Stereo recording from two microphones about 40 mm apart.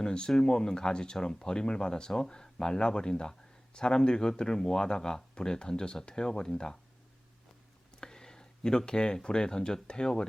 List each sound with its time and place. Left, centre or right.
0.0 s speech: left
8.0 s a sound: centre
8.9 s speech: left